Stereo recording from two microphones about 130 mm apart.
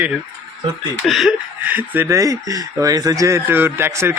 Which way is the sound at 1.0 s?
Centre (ahead or behind).